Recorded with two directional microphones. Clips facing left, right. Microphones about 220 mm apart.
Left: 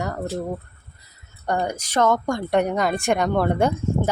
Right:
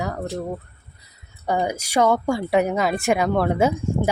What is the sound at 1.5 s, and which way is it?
Speech, 10° right (ahead or behind).